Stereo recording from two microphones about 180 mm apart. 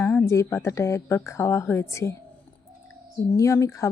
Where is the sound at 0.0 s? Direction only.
10° left (ahead or behind).